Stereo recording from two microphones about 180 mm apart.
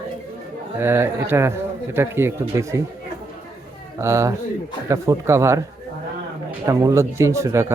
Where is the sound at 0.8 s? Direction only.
10° right (ahead or behind).